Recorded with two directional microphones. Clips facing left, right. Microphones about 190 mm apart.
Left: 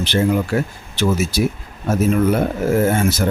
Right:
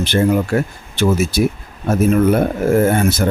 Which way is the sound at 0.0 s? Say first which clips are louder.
Right 2 dB; 50° right (ahead or behind).